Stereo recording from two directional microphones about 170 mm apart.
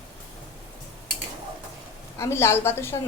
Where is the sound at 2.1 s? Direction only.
15° left (ahead or behind).